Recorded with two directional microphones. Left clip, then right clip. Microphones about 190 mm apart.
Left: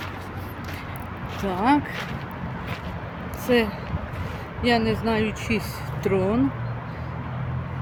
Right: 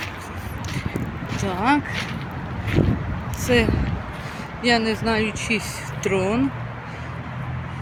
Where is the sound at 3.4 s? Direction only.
Centre (ahead or behind).